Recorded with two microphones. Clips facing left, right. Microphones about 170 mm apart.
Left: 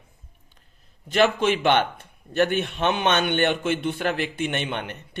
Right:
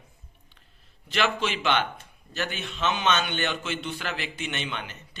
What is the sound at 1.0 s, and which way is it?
A man's voice, 45° left (ahead or behind).